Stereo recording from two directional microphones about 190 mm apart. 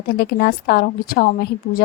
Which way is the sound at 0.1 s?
55° left (ahead or behind).